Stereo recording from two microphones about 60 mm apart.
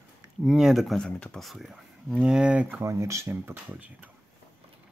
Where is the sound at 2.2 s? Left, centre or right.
Centre.